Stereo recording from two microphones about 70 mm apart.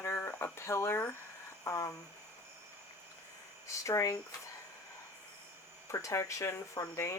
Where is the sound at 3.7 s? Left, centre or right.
Left.